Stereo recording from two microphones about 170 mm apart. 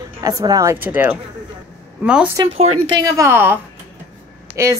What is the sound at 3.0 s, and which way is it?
Speech, 20° right (ahead or behind).